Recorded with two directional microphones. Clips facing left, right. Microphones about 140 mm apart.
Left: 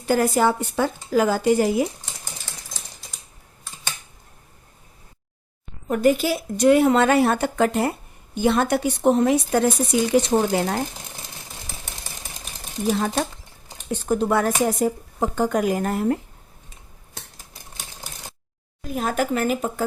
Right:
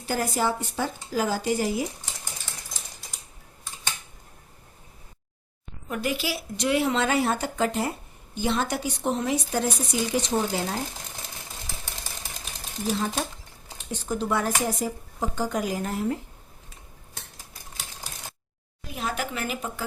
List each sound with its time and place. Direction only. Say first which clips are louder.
0.0 s speech: left 7 dB; 60° left (ahead or behind)
5.9 s speech: left 10 dB; 45° left (ahead or behind)
14.1 s speech: left 6 dB; 55° left (ahead or behind)
18.8 s speech: left 7 dB; 45° left (ahead or behind)